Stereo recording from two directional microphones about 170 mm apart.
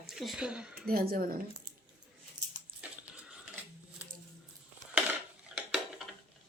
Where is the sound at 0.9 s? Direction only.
60° right (ahead or behind).